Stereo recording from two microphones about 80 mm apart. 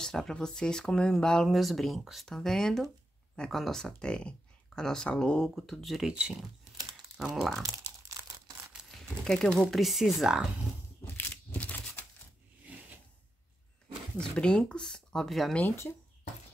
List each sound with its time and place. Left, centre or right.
0.0 s speech: centre
7.2 s speech: centre
8.2 s a sound: right
8.9 s speech: centre
11.1 s crumpling: centre
14.3 s speech: centre
15.7 s speech: left